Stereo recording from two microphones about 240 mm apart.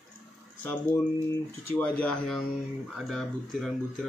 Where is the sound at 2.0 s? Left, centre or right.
Centre.